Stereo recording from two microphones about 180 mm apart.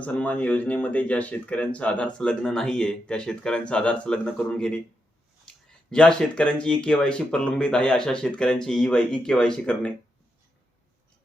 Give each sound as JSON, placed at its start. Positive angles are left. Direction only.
{"t": 0.0, "sound": "speech", "side_deg": 5}
{"t": 5.9, "sound": "speech", "side_deg": 5}